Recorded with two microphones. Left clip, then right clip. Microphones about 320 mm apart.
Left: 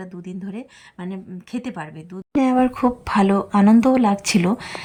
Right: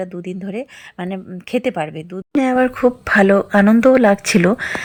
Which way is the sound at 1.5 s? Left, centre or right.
Left.